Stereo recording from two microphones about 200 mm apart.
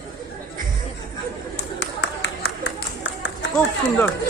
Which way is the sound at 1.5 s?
60° left (ahead or behind).